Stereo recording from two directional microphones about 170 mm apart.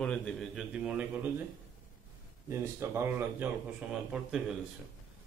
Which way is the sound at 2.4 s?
15° right (ahead or behind).